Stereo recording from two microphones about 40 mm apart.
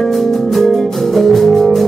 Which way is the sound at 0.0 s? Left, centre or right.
Centre.